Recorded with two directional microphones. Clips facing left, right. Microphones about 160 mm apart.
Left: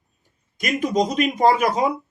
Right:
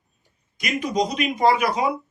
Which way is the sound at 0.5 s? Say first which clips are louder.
Left 3 dB; 45° left (ahead or behind).